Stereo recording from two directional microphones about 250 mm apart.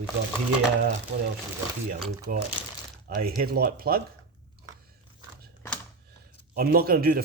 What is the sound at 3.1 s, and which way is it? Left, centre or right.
Speech, right.